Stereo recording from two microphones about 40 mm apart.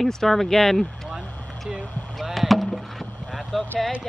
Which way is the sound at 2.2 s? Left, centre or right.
Centre.